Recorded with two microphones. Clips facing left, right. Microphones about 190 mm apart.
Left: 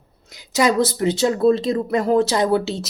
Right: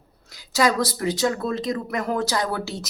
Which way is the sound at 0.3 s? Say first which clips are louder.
Left 3 dB; 20° left (ahead or behind).